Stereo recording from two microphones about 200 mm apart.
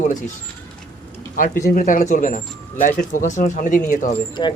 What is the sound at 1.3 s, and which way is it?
Speech, 40° left (ahead or behind).